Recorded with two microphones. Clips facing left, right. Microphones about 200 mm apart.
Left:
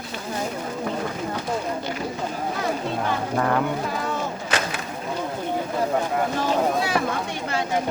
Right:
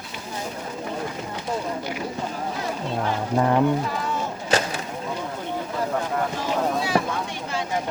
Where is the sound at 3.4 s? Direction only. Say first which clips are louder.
Right 3 dB; 20° right (ahead or behind).